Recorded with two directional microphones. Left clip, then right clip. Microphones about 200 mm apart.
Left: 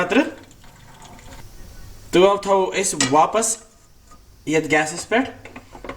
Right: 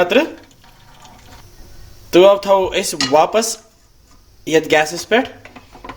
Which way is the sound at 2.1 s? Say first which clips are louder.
Right 5 dB; 35° right (ahead or behind).